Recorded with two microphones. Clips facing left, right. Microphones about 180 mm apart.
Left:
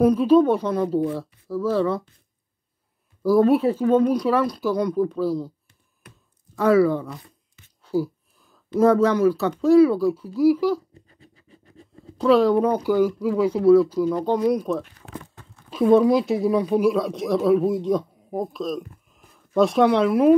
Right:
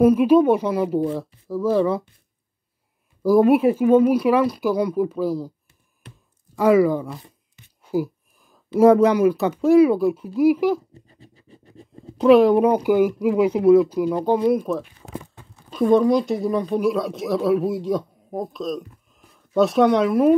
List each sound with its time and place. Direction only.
0.0 s speech: 10° right (ahead or behind)
3.2 s speech: 15° right (ahead or behind)
6.5 s speech: 15° right (ahead or behind)
11.1 s speech: 30° right (ahead or behind); by 14.8 s centre (ahead or behind)
15.1 s a sound: 15° right (ahead or behind)
15.7 s a woman's voice: 5° left (ahead or behind)